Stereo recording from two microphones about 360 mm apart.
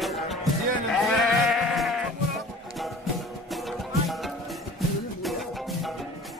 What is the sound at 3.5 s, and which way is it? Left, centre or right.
Music, centre.